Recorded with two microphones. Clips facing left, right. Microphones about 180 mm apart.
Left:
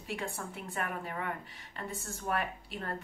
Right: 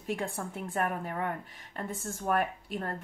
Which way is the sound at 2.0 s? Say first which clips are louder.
Right 5 dB; 50° right (ahead or behind).